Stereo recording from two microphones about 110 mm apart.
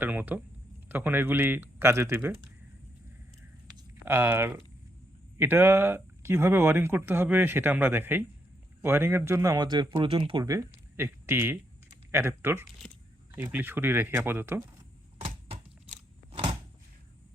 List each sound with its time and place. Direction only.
0.0 s speech: 15° right (ahead or behind)
4.0 s a man's voice: 20° right (ahead or behind); by 10.4 s 55° right (ahead or behind)
10.4 s speech: 30° right (ahead or behind)